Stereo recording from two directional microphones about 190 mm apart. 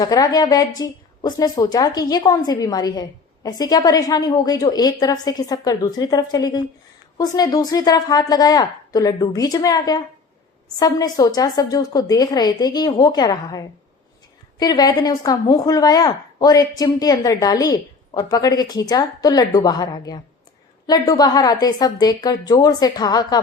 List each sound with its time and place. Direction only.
0.0 s a woman's voice: 20° left (ahead or behind)